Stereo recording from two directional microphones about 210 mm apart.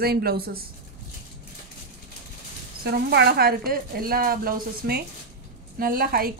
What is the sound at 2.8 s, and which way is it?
A woman's voice, 50° right (ahead or behind).